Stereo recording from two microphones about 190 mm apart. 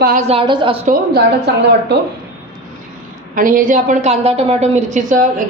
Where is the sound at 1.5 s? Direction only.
60° right (ahead or behind).